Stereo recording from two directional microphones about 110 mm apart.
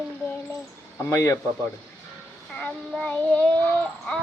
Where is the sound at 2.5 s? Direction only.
15° left (ahead or behind).